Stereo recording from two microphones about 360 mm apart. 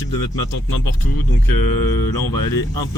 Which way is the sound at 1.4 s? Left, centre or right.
Left.